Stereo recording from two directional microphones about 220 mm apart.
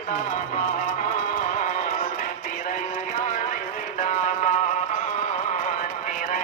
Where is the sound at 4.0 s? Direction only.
35° left (ahead or behind).